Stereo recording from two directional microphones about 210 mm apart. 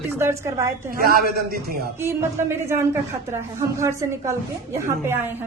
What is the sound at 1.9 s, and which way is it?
Speech, 10° right (ahead or behind).